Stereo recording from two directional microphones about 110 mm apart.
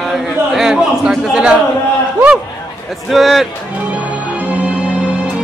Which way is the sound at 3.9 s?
15° right (ahead or behind).